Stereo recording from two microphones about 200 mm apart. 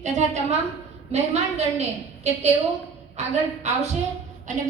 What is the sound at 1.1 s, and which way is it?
A woman's voice, 35° right (ahead or behind).